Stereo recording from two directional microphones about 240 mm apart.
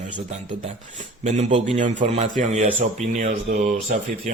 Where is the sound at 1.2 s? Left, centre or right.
Right.